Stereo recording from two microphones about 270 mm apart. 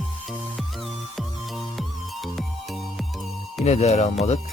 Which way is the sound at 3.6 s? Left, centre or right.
Left.